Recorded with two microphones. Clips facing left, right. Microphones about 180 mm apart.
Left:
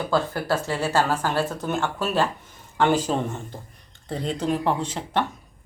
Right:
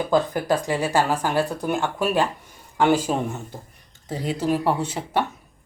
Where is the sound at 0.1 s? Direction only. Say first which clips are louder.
Right 3 dB; 15° right (ahead or behind).